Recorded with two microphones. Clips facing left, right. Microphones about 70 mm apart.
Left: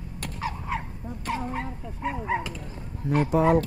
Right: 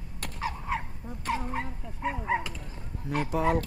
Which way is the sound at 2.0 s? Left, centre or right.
Centre.